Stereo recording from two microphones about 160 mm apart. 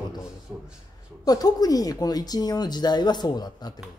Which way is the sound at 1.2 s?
25° left (ahead or behind).